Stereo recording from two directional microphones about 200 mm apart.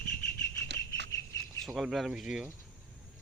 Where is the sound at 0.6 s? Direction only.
60° right (ahead or behind).